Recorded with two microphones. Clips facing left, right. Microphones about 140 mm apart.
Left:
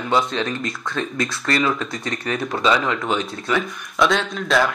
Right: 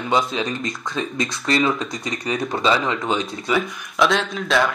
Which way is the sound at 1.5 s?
Centre (ahead or behind).